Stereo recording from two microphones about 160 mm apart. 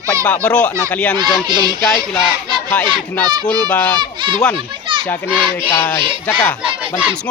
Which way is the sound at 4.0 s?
30° right (ahead or behind).